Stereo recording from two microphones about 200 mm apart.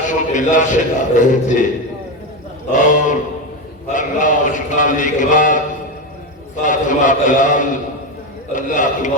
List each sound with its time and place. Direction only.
0.1 s a man's voice: 40° left (ahead or behind)
2.7 s a man's voice: 40° left (ahead or behind)
3.8 s a sound: 40° left (ahead or behind)
6.6 s a man's voice: 40° left (ahead or behind)